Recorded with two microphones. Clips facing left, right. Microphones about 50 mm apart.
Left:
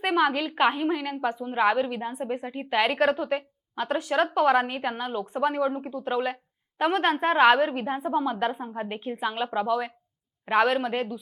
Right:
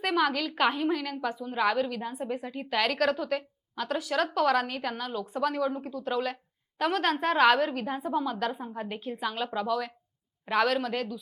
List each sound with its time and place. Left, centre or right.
0.0 s a woman's voice: centre